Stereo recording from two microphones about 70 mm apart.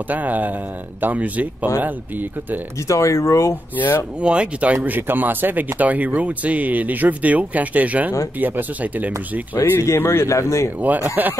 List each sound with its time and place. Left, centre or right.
0.1 s speech: right
2.9 s speech: left
3.7 s speech: left
4.2 s speech: centre
4.8 s speech: right
9.8 s speech: left
11.1 s speech: right